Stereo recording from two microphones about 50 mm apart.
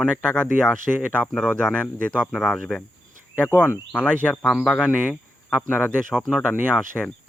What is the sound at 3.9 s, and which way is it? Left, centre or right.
Speech, left.